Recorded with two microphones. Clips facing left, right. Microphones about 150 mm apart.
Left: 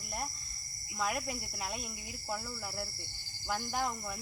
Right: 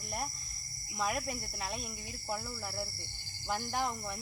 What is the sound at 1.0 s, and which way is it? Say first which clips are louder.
Cricket: even; centre (ahead or behind).